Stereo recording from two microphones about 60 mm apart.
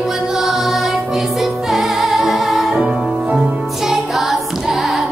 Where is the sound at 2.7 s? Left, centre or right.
Centre.